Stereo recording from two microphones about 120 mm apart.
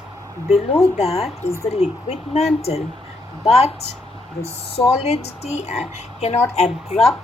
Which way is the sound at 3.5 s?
60° left (ahead or behind).